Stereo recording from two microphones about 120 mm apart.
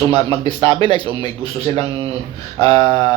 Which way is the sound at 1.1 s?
45° right (ahead or behind).